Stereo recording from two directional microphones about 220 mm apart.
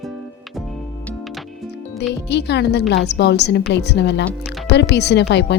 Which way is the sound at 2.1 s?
50° left (ahead or behind).